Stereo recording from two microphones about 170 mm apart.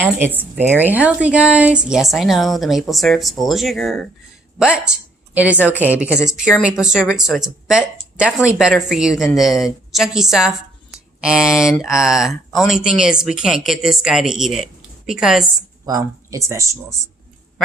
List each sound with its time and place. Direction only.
0.3 s speech: 10° right (ahead or behind)
15.9 s speech: 20° right (ahead or behind)